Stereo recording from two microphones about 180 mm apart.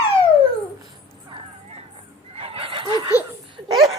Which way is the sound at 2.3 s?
35° right (ahead or behind).